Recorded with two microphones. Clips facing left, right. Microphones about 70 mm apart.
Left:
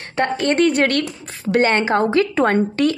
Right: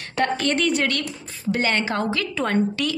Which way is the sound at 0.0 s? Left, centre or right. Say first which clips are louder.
Left 3 dB; left.